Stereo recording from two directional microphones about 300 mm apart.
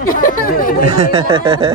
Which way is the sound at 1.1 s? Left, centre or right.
Centre.